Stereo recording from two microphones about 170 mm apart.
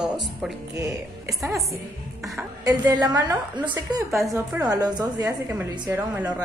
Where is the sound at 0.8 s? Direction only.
20° right (ahead or behind).